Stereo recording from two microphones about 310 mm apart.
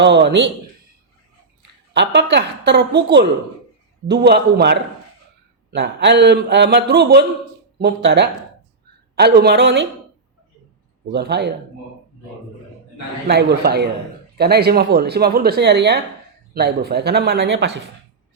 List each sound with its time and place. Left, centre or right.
0.0 s speech: right
1.9 s speech: right
11.1 s speech: right
13.2 s speech: right